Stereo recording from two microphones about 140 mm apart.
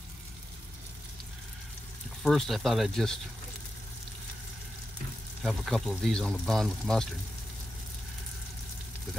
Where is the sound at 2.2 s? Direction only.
Centre (ahead or behind).